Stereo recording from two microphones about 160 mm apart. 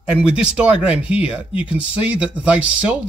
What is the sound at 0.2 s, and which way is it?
Speech, 5° right (ahead or behind).